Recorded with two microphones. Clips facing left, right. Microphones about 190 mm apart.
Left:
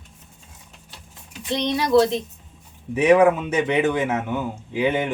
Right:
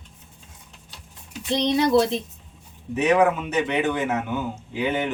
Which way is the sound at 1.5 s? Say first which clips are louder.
Right 2 dB; 20° right (ahead or behind).